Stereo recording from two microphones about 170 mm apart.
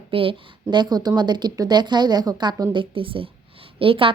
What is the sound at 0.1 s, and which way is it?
A woman's voice, 30° right (ahead or behind).